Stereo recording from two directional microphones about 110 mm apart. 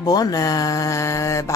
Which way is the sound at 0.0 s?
35° left (ahead or behind).